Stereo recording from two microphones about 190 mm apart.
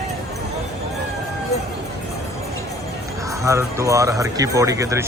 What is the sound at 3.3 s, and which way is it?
A man's voice, 15° right (ahead or behind).